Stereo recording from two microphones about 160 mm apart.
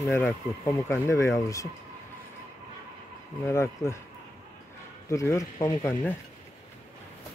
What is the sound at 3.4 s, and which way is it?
Speech, 15° left (ahead or behind).